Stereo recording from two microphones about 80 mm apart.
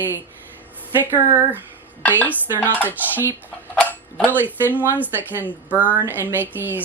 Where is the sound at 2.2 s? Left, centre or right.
Left.